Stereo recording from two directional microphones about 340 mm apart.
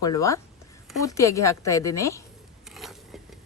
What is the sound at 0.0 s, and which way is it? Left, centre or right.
A woman's voice, centre.